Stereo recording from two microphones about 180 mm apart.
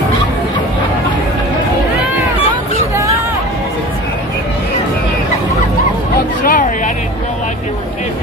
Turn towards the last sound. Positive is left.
turn(degrees=50)  # may be behind; listen again after turning